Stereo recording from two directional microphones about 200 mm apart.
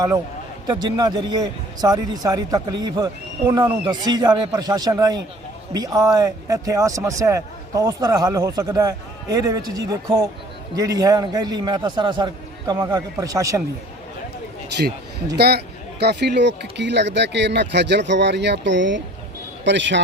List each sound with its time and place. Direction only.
0.7 s a man's voice: 20° right (ahead or behind)
15.4 s speech: 55° right (ahead or behind)